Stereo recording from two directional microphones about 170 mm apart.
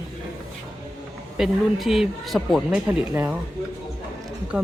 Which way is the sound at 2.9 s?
10° right (ahead or behind).